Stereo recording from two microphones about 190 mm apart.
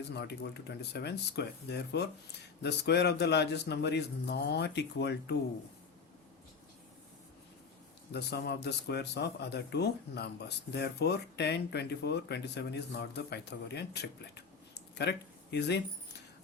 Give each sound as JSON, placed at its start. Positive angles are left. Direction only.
{"t": 0.1, "sound": "speech", "side_deg": 60}
{"t": 8.1, "sound": "speech", "side_deg": 60}